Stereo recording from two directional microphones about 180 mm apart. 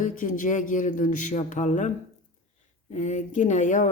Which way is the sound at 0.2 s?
45° left (ahead or behind).